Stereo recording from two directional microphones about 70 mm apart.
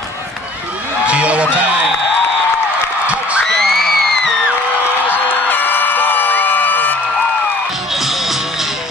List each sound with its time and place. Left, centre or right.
1.0 s music: centre
3.4 s a sound: centre
5.5 s music: left
7.9 s music: centre